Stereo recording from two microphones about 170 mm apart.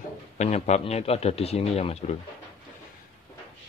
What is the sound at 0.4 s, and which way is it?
A man's voice, 40° left (ahead or behind).